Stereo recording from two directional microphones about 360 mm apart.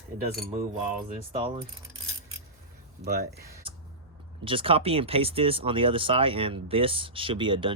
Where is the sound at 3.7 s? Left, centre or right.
Centre.